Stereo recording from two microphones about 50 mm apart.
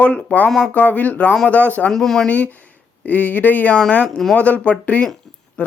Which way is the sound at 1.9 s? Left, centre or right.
Centre.